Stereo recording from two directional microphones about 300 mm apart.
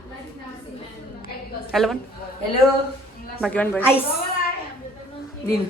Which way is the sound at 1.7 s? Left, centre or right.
Centre.